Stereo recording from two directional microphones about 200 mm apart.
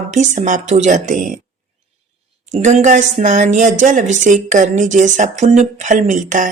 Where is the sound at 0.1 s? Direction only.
35° right (ahead or behind).